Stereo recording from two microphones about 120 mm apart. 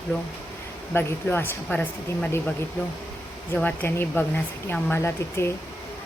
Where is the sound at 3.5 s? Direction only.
15° left (ahead or behind).